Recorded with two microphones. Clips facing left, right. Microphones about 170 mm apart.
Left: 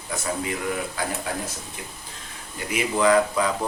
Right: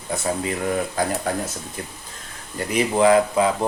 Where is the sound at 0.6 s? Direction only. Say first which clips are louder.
Right 5 dB; 40° right (ahead or behind).